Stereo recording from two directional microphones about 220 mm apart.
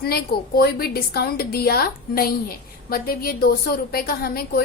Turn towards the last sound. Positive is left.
turn(degrees=45)  # may be behind; listen again after turning